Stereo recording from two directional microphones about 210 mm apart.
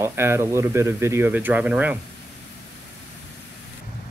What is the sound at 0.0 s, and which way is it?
Speech, 10° right (ahead or behind).